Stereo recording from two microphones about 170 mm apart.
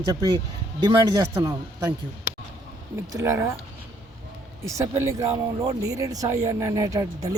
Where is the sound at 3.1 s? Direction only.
15° right (ahead or behind).